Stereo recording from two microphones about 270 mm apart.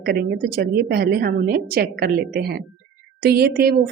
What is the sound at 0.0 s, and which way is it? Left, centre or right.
A woman's voice, right.